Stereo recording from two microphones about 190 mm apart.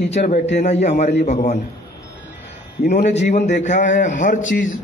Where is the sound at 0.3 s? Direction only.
35° left (ahead or behind).